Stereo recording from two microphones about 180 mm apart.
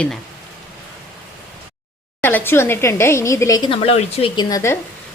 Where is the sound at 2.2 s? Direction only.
10° left (ahead or behind).